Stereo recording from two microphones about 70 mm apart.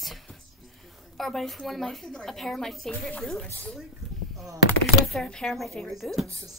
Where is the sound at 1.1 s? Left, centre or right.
Centre.